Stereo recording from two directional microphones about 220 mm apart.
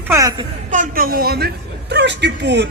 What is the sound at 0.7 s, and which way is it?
A woman's voice, 40° right (ahead or behind).